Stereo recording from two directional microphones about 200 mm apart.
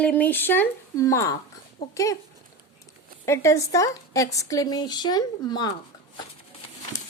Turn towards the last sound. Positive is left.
turn(degrees=20)  # may be behind; listen again after turning